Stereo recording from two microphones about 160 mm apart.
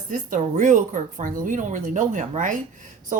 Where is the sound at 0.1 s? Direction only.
50° right (ahead or behind).